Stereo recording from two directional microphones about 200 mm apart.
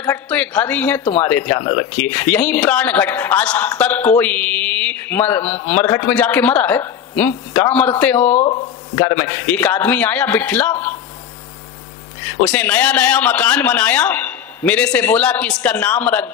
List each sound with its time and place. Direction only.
0.0 s a woman's voice: 10° left (ahead or behind)
1.0 s speech: 25° left (ahead or behind)
1.3 s a man's voice: 10° left (ahead or behind)
5.4 s a man's voice: 30° left (ahead or behind)
5.8 s a man's voice: 15° left (ahead or behind)
8.2 s a man's voice: 30° left (ahead or behind); by 11.0 s 10° left (ahead or behind)
12.4 s a man's voice: 10° left (ahead or behind)